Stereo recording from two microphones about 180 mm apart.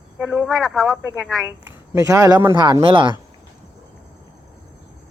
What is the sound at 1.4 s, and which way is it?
Speech, 15° right (ahead or behind).